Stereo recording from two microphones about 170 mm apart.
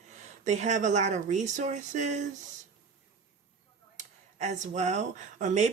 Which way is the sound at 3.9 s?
45° right (ahead or behind).